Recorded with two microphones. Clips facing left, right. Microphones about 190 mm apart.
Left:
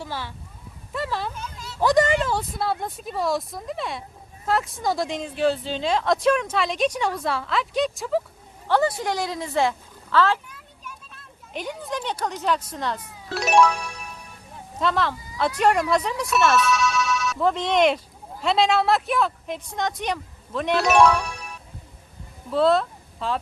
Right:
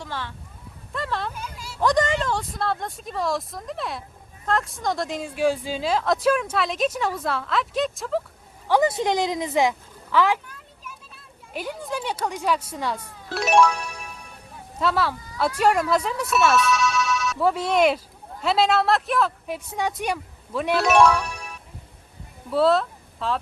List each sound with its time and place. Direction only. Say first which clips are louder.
0.0 s speech: left 1 dB; 10° left (ahead or behind)
1.3 s a sound: even; 10° right (ahead or behind)
1.8 s speech: left 2 dB; 5° left (ahead or behind)
8.6 s a woman's voice: right 2 dB; 10° right (ahead or behind)
10.8 s a sound: left 1 dB; 5° right (ahead or behind)
12.2 s speech: even; 10° right (ahead or behind)
13.0 s speech: right 1 dB; 5° left (ahead or behind)
14.8 s speech: even; 5° right (ahead or behind)
22.5 s speech: even; centre (ahead or behind)